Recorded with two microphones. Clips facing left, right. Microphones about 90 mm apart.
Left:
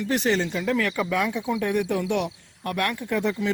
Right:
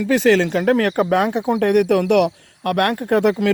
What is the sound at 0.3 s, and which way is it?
Speech, 80° right.